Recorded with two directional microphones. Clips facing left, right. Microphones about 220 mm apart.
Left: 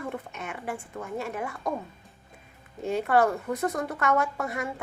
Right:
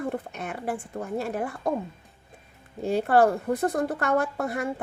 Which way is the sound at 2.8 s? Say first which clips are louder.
Right 3 dB; 35° right (ahead or behind).